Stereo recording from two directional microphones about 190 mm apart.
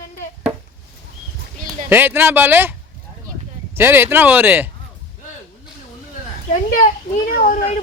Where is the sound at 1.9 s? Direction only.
10° right (ahead or behind).